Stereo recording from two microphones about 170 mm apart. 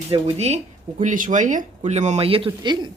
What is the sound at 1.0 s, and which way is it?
Speech, 50° right (ahead or behind).